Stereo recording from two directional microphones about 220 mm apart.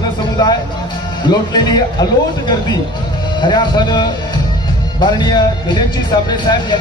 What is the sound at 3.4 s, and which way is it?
Speech, 20° left (ahead or behind).